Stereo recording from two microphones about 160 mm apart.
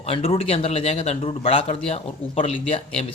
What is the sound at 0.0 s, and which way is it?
Speech, 35° left (ahead or behind).